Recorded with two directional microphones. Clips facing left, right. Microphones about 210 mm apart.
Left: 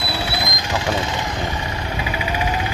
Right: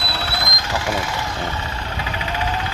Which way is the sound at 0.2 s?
15° left (ahead or behind).